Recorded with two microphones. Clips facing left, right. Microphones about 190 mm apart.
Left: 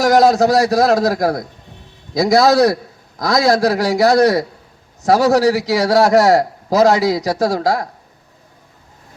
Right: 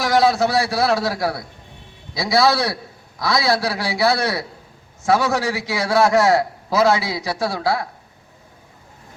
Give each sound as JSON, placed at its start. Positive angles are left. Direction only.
{"t": 0.0, "sound": "a man's voice", "side_deg": 40}